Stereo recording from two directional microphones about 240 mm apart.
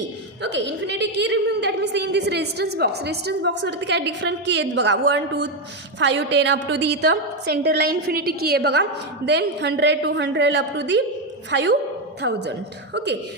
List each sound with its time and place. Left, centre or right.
0.4 s a woman's voice: right